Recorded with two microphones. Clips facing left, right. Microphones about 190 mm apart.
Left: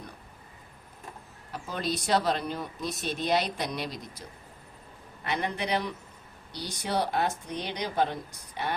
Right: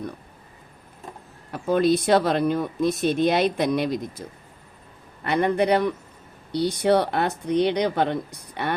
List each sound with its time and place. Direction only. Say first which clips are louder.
1.5 s speech: right 13 dB; 55° right (ahead or behind)
5.2 s speech: right 10 dB; 55° right (ahead or behind)